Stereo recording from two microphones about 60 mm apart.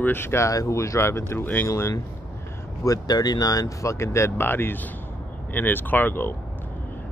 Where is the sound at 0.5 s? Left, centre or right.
Left.